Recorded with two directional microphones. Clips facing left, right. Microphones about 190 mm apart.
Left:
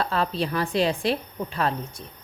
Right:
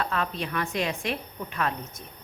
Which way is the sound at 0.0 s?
35° left (ahead or behind).